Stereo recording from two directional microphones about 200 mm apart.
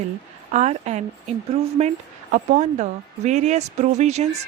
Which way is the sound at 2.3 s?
35° right (ahead or behind).